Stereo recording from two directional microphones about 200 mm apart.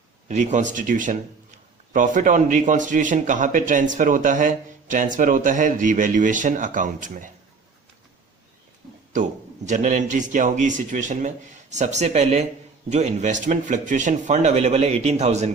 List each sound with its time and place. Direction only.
0.3 s speech: 35° right (ahead or behind)
9.1 s speech: 40° right (ahead or behind)